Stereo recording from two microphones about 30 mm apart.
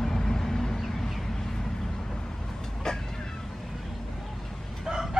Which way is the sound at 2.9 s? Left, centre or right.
Left.